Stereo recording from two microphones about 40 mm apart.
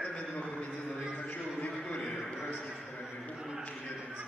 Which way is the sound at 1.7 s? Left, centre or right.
Left.